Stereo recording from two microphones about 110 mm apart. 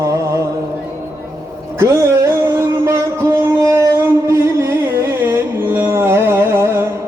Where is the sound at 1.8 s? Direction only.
25° right (ahead or behind).